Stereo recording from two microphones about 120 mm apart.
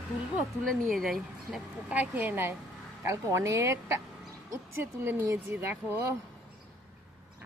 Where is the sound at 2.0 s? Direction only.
15° right (ahead or behind).